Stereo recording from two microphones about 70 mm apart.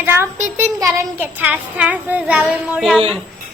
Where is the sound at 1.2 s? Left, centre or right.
Right.